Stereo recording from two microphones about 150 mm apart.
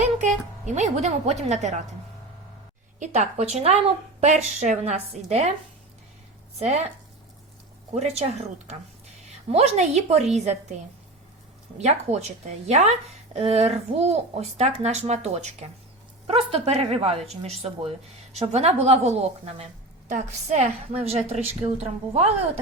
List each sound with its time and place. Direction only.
0.0 s a woman's voice: 55° right (ahead or behind)
3.0 s a woman's voice: 50° right (ahead or behind)
6.6 s a woman's voice: 45° right (ahead or behind)
7.9 s a woman's voice: 45° right (ahead or behind)
9.5 s a woman's voice: 45° right (ahead or behind)
11.8 s a woman's voice: 50° right (ahead or behind)